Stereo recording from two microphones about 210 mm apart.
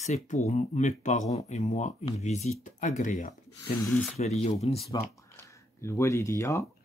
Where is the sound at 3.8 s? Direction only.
5° left (ahead or behind).